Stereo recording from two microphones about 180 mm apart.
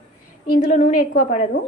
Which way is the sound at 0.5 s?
45° left (ahead or behind).